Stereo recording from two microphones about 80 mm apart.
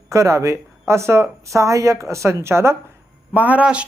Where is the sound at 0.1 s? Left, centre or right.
Right.